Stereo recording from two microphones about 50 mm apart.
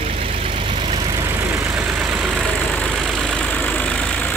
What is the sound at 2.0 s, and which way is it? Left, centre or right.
Vehicle, centre.